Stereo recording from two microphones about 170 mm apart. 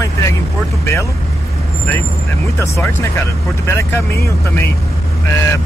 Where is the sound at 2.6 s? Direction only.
15° left (ahead or behind).